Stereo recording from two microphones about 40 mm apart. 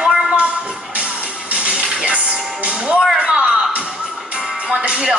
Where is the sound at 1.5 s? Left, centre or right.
Right.